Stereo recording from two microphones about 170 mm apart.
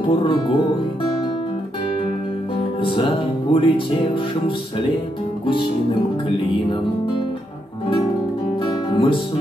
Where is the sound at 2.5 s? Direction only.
30° left (ahead or behind).